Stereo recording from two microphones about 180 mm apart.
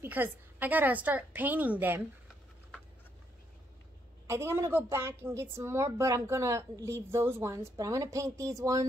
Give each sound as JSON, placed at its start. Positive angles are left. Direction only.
{"t": 0.0, "sound": "a woman's voice", "side_deg": -10}
{"t": 4.3, "sound": "a woman's voice", "side_deg": -15}